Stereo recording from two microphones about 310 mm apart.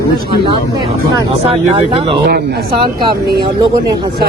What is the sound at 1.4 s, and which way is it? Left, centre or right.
Speech, centre.